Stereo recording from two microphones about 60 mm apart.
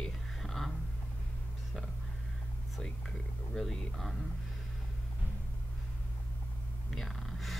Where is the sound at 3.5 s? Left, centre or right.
Centre.